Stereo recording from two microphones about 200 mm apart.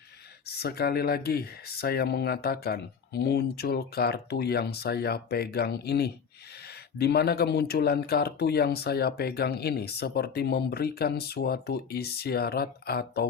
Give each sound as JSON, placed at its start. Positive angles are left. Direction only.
{"t": 0.4, "sound": "speech", "side_deg": 50}